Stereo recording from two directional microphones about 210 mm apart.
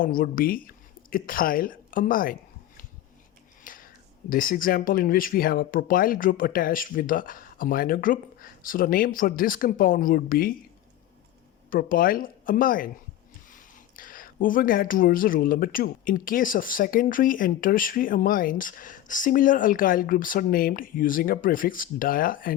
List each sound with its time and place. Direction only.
0.0 s a woman's voice: 40° left (ahead or behind)
3.6 s whispering: 40° left (ahead or behind)
4.3 s speech: 40° left (ahead or behind)
11.7 s speech: 40° left (ahead or behind)